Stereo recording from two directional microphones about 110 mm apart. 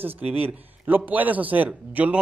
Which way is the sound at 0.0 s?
15° right (ahead or behind).